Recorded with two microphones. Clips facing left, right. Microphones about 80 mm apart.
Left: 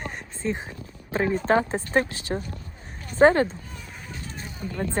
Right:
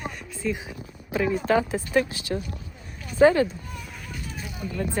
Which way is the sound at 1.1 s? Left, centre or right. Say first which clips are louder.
Left 1 dB; left.